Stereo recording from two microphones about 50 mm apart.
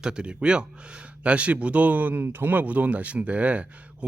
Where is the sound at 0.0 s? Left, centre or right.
Centre.